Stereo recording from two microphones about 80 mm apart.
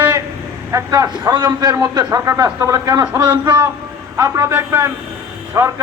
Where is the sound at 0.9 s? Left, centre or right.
Right.